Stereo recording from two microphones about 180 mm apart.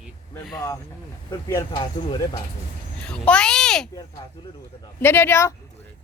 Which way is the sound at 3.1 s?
5° left (ahead or behind).